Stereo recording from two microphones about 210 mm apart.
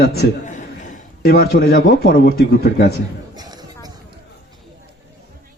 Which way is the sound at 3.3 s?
20° right (ahead or behind).